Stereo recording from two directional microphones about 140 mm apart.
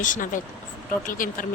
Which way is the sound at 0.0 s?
70° left (ahead or behind).